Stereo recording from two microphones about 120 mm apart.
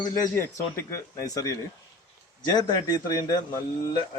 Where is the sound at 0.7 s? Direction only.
25° left (ahead or behind).